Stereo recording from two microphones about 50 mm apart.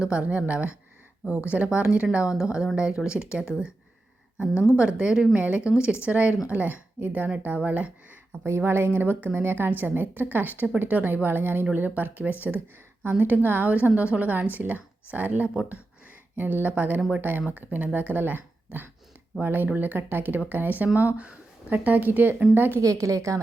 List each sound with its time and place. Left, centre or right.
0.0 s speech: right
4.8 s speech: centre
8.4 s a woman's voice: right
8.9 s a woman's voice: right
22.8 s a woman's voice: right